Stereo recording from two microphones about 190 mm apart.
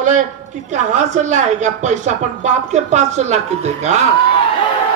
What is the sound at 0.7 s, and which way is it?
A woman's voice, 40° right (ahead or behind).